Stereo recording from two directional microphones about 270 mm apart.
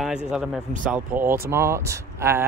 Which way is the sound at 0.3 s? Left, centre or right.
Centre.